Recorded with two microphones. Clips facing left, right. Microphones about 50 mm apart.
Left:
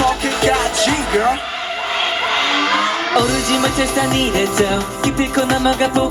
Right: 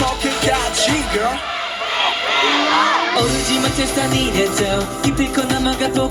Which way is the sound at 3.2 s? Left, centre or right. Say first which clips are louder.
Left 2 dB; left.